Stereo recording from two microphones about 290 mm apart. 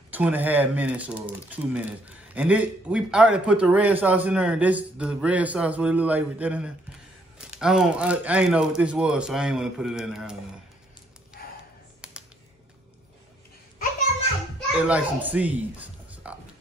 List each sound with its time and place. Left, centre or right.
0.1 s speech: centre
11.4 s a sound: left
12.0 s computer keyboard: centre
14.8 s speech: centre